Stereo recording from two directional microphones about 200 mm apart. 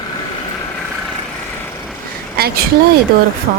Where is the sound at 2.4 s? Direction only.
50° right (ahead or behind).